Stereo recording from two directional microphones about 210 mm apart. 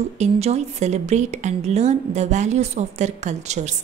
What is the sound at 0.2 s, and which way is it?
A woman's voice, 30° right (ahead or behind).